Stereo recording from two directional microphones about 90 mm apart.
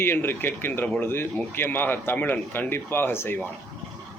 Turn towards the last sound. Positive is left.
turn(degrees=25)  # may be behind; listen again after turning